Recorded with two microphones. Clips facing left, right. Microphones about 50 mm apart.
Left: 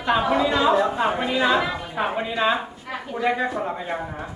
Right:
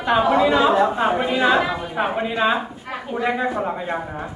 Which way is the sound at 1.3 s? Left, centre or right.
Centre.